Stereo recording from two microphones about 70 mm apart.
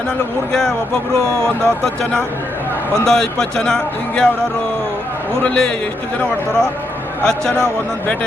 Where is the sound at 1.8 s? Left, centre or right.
Centre.